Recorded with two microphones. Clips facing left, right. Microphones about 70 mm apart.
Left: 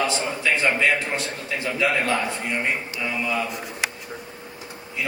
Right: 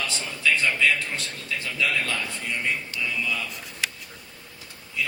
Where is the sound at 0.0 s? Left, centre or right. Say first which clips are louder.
Left 4 dB; left.